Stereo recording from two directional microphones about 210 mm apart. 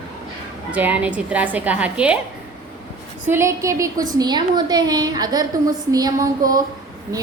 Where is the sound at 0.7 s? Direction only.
5° right (ahead or behind).